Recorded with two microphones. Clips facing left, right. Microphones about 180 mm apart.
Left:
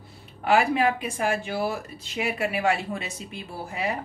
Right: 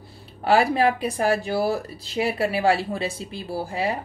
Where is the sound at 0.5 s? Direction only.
35° right (ahead or behind).